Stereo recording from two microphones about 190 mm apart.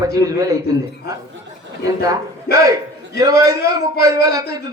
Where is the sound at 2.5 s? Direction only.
20° right (ahead or behind).